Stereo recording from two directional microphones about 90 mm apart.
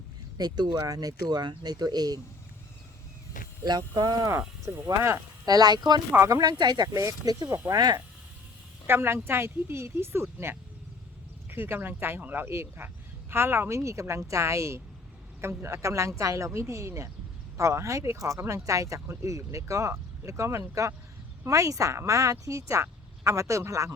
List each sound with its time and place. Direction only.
0.3 s speech: 50° right (ahead or behind)
3.6 s speech: 50° right (ahead or behind)
4.3 s speech: 35° right (ahead or behind)
5.5 s speech: 45° right (ahead or behind)
7.7 s speech: 50° right (ahead or behind)
8.9 s speech: 25° right (ahead or behind)